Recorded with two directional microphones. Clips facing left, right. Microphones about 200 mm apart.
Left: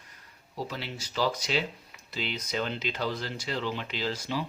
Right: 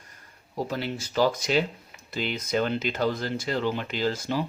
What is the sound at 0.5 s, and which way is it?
Speech, 50° right (ahead or behind).